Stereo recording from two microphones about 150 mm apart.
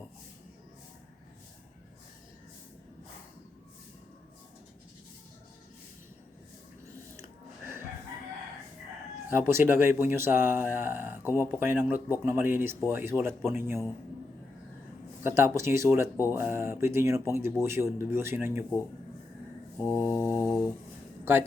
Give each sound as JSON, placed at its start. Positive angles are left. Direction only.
{"t": 7.2, "sound": "music", "side_deg": -15}
{"t": 9.3, "sound": "speech", "side_deg": -15}
{"t": 15.2, "sound": "speech", "side_deg": -15}
{"t": 20.2, "sound": "a sound", "side_deg": 15}
{"t": 21.3, "sound": "speech", "side_deg": -15}